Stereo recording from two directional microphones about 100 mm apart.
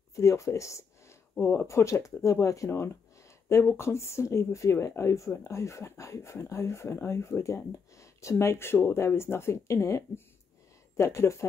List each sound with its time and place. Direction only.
0.1 s speech: 30° left (ahead or behind)